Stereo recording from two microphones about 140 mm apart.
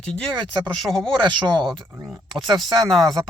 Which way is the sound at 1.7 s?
Centre (ahead or behind).